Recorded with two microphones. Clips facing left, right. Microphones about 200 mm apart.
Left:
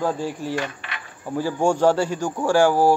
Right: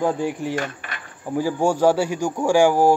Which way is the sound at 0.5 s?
50° right (ahead or behind).